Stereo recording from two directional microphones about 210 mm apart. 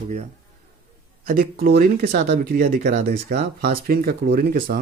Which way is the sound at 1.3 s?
45° right (ahead or behind).